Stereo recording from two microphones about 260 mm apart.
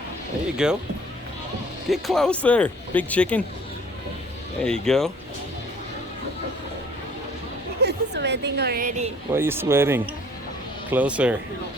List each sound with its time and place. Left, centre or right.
0.5 s speech: centre
1.9 s speech: centre
4.6 s speech: centre
7.8 s a woman's voice: right
9.3 s speech: centre